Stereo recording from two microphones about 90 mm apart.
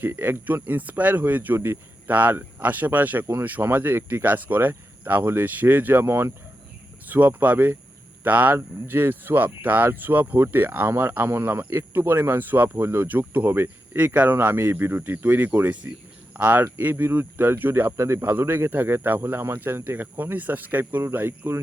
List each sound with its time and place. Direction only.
0.0 s speech: 20° right (ahead or behind)